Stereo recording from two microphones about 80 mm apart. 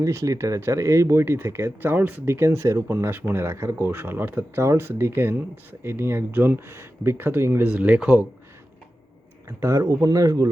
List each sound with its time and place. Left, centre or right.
0.0 s speech: right; by 8.3 s centre
9.5 s speech: right